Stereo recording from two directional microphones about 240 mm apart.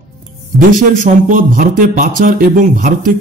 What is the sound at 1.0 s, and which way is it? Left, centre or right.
Speech, right.